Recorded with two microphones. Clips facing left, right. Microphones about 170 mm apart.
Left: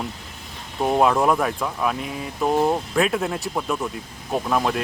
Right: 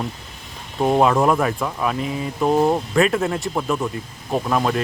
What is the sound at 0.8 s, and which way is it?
Speech, 5° right (ahead or behind).